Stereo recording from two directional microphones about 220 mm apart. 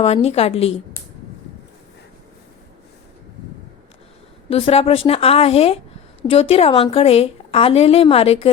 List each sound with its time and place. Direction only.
0.0 s a woman's voice: 30° left (ahead or behind)
4.4 s a woman's voice: 25° left (ahead or behind)